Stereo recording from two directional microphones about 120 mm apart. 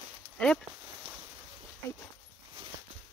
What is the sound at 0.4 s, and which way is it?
Speech, 10° left (ahead or behind).